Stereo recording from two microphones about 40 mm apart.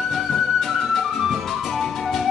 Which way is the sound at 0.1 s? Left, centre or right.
Centre.